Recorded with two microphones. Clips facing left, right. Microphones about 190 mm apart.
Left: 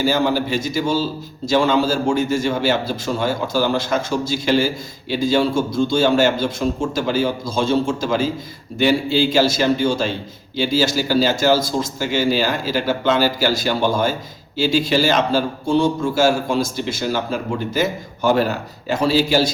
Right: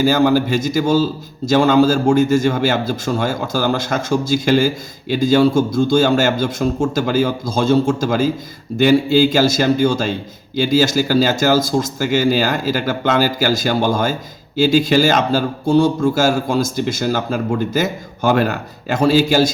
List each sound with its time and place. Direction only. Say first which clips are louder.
0.0 s a man's voice: right 4 dB; 45° right (ahead or behind)